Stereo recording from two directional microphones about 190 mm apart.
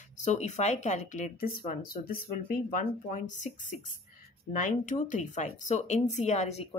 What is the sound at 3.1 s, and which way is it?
A woman's voice, 40° left (ahead or behind).